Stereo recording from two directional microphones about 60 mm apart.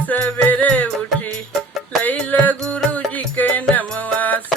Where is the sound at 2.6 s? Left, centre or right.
Centre; by 4.4 s left.